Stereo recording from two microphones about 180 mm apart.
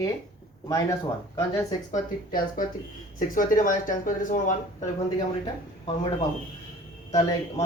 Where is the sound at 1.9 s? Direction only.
50° left (ahead or behind).